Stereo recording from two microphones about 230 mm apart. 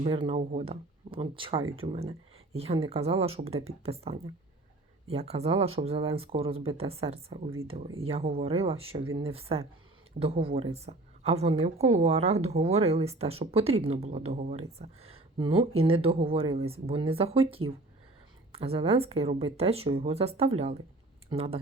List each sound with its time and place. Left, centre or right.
0.0 s a woman's voice: right